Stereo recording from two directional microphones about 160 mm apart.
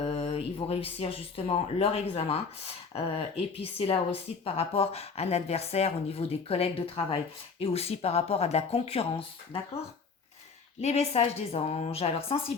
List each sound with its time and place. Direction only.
0.0 s speech: 40° left (ahead or behind)
10.8 s speech: 40° left (ahead or behind)